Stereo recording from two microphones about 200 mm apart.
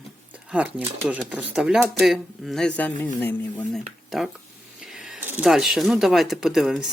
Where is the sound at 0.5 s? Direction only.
5° right (ahead or behind).